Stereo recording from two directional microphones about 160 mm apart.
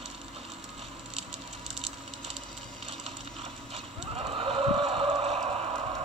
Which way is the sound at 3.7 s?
35° right (ahead or behind).